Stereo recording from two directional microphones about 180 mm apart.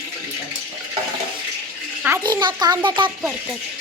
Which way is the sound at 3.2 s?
Centre (ahead or behind).